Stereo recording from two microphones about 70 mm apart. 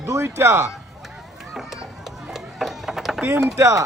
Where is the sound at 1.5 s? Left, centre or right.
Centre.